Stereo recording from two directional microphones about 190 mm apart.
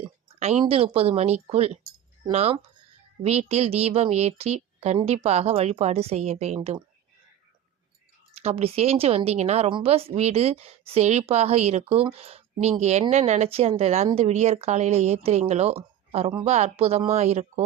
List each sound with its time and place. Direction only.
0.0 s a sound: 35° right (ahead or behind)
0.6 s a woman's voice: 30° right (ahead or behind)
8.4 s a woman's voice: 30° right (ahead or behind)